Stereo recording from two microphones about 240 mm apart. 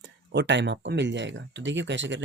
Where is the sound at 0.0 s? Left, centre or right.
Right.